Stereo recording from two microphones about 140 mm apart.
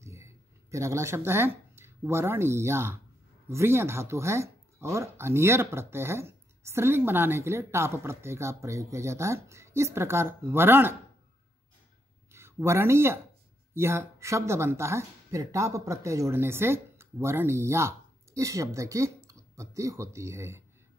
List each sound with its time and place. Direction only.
0.0 s speech: 20° right (ahead or behind)
12.3 s speech: 20° right (ahead or behind)